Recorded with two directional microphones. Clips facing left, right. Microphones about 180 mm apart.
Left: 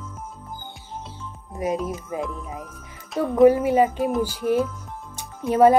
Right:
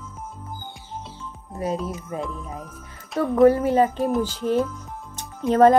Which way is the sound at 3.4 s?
15° left (ahead or behind).